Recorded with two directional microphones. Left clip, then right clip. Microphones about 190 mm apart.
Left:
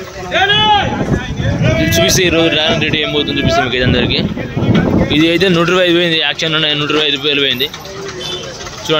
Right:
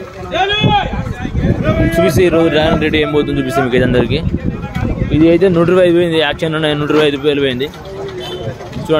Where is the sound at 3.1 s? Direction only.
35° right (ahead or behind); by 4.2 s 15° right (ahead or behind).